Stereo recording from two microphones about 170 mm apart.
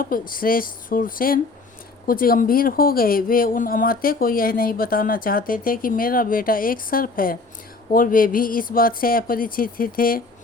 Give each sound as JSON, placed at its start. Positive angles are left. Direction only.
{"t": 0.0, "sound": "speech", "side_deg": 55}